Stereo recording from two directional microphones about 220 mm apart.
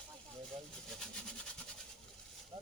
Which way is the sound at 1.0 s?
5° left (ahead or behind).